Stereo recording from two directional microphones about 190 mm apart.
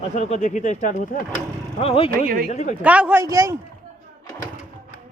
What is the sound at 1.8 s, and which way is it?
Speech, 30° left (ahead or behind).